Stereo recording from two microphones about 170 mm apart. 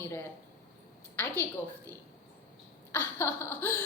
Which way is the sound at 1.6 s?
10° left (ahead or behind).